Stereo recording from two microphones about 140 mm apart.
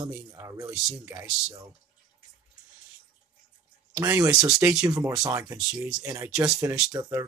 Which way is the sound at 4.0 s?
20° right (ahead or behind).